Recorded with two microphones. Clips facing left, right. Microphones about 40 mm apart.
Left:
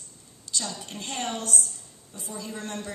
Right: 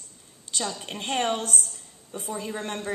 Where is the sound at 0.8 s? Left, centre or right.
Right.